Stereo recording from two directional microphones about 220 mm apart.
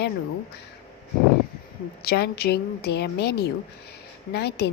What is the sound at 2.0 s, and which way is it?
Speech, 45° left (ahead or behind).